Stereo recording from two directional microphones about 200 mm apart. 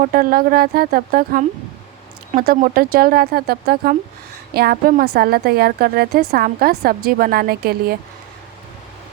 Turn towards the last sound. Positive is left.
turn(degrees=-50)  # may be behind; listen again after turning